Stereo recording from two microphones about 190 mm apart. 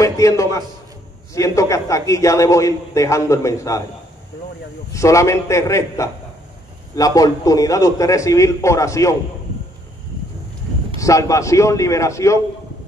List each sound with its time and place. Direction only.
0.0 s a man's voice: 15° left (ahead or behind)
4.9 s a man's voice: 15° left (ahead or behind)
11.0 s a man's voice: 15° left (ahead or behind)